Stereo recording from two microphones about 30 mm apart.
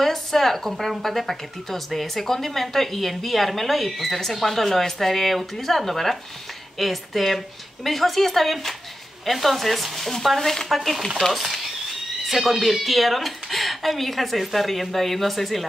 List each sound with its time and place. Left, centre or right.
0.0 s speech: centre
12.3 s speech: centre